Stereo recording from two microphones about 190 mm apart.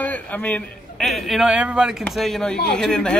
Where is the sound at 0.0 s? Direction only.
10° left (ahead or behind).